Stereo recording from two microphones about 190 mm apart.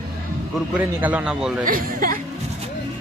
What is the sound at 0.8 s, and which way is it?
Speech, 10° right (ahead or behind).